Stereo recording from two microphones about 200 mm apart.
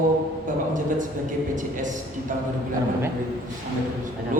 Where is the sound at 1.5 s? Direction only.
40° right (ahead or behind).